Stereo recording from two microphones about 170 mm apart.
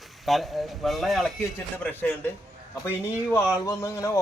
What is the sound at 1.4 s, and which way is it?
Speech, 10° left (ahead or behind).